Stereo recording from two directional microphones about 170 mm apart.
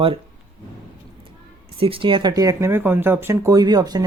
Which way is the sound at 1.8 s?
30° right (ahead or behind).